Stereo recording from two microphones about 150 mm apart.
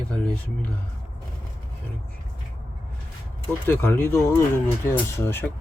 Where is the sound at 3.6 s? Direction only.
15° left (ahead or behind).